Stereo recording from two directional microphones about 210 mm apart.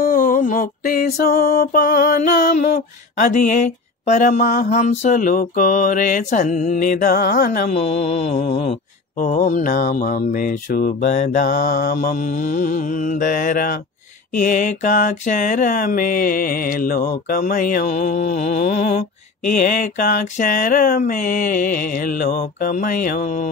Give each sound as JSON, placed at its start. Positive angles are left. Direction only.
{"t": 0.0, "sound": "mantra", "side_deg": 40}
{"t": 7.7, "sound": "mantra", "side_deg": 30}
{"t": 19.8, "sound": "mantra", "side_deg": 40}